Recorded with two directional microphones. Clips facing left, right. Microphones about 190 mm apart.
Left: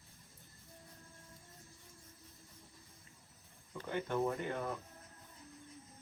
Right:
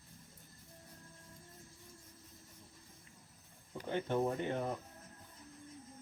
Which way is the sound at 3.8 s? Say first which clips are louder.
Right 1 dB; 25° right (ahead or behind).